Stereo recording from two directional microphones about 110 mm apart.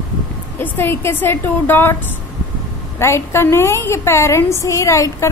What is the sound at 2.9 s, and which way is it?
A woman's voice, 25° left (ahead or behind).